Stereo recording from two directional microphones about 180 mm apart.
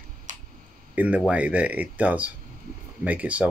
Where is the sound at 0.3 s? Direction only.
45° right (ahead or behind).